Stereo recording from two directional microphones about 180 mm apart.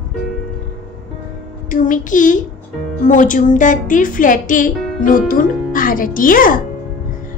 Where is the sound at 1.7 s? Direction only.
45° left (ahead or behind).